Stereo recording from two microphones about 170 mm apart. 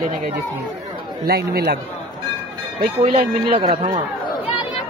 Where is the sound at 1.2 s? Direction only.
65° right (ahead or behind).